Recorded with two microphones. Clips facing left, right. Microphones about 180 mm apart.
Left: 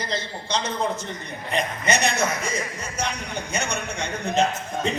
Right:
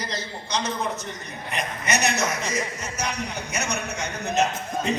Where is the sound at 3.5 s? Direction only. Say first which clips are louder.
Left 1 dB; 30° left (ahead or behind).